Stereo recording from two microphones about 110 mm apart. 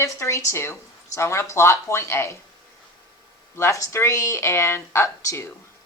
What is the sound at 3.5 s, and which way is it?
Speech, 25° left (ahead or behind).